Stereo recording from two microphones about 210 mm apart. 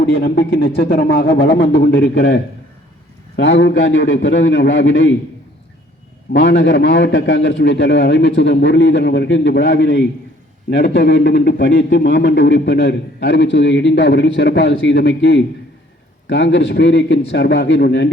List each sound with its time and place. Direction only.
0.0 s a man's voice: 50° left (ahead or behind)
6.3 s a man's voice: 55° left (ahead or behind)